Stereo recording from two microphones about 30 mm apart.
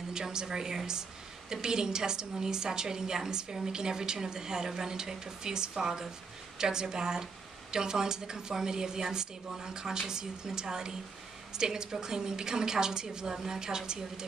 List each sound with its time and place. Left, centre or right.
0.1 s a woman's voice: right